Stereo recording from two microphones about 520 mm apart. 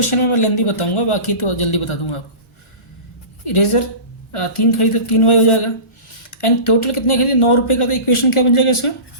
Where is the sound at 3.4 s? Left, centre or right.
Left.